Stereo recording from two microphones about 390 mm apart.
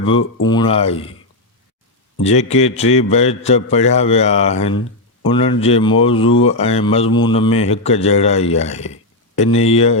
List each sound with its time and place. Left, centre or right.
0.0 s a man's voice: centre
2.2 s a man's voice: centre